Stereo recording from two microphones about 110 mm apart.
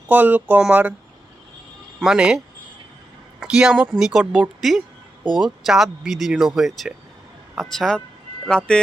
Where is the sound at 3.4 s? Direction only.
5° right (ahead or behind).